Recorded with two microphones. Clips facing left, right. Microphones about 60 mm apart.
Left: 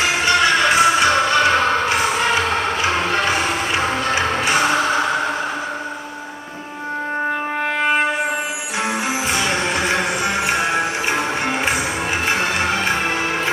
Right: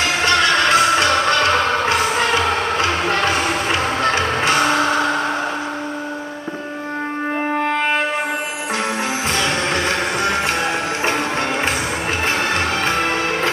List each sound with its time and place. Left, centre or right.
0.0 s music: centre
3.3 s music: centre
9.4 s music: centre